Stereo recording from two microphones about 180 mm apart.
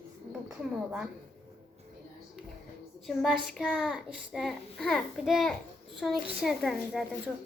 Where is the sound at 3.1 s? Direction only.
Centre (ahead or behind).